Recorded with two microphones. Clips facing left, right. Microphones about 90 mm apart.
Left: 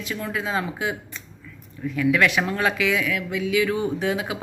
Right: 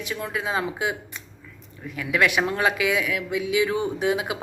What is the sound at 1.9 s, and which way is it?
Speech, 20° right (ahead or behind).